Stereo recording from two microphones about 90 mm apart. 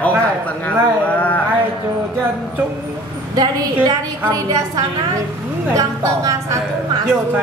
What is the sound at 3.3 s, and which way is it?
A woman's voice, 50° right (ahead or behind).